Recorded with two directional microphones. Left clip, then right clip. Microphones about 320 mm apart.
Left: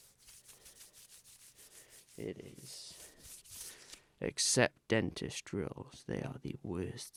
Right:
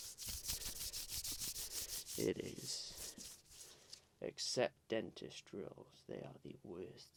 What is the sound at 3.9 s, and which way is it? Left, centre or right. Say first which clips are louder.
Speech: left 7 dB; left.